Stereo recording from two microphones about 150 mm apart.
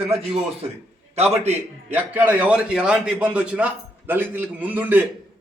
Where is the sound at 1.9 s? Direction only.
10° right (ahead or behind).